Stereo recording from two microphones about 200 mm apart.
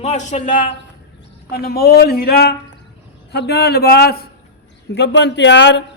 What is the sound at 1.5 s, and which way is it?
A man's voice, 50° left (ahead or behind).